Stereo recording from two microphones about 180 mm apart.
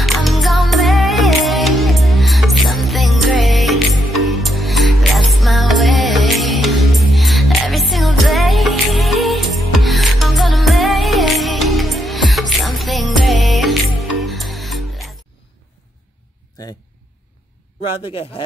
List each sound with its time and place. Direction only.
0.0 s music: centre (ahead or behind)